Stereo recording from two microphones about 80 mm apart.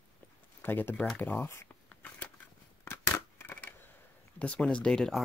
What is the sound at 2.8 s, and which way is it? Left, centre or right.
Scissors, left.